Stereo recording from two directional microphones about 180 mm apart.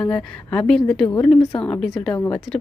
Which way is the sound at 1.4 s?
25° left (ahead or behind).